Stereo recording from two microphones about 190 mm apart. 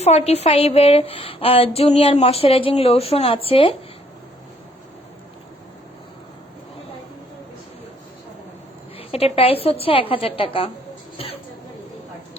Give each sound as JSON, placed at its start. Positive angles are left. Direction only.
{"t": 0.0, "sound": "a woman's voice", "side_deg": 35}
{"t": 9.0, "sound": "a woman's voice", "side_deg": 30}